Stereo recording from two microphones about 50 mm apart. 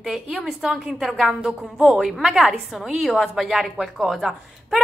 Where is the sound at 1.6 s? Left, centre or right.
Right.